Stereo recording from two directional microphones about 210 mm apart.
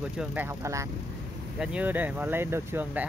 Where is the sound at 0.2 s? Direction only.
10° right (ahead or behind).